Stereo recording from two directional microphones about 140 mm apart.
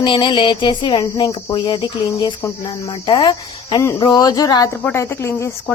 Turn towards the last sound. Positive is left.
turn(degrees=20)  # may be behind; listen again after turning